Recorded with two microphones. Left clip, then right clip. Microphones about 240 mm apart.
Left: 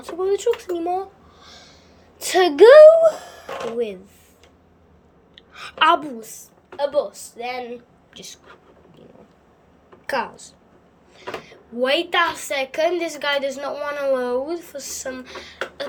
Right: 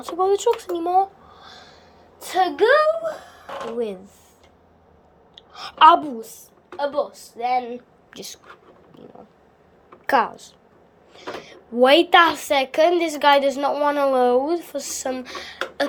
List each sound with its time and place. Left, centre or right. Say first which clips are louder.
0.0 s speech: right 2 dB; centre
0.8 s a sound: right 5 dB; centre
2.1 s a woman's voice: left 5 dB; centre
3.8 s speech: even; centre
5.3 s a woman's voice: right 1 dB; centre
10.1 s speech: right 6 dB; centre